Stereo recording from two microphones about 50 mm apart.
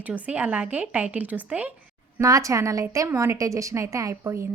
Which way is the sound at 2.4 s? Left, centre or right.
Right.